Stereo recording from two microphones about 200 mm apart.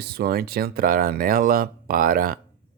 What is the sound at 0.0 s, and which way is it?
Speech, 50° right (ahead or behind).